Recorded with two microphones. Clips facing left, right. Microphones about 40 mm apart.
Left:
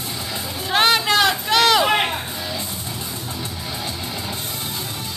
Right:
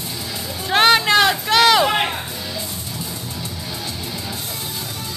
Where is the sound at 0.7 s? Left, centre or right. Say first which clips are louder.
Right 3 dB; centre.